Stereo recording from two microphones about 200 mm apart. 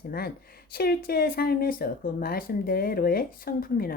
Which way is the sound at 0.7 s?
50° left (ahead or behind).